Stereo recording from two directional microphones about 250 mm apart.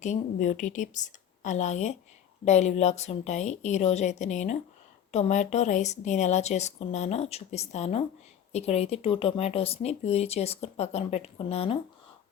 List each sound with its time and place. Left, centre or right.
0.0 s speech: left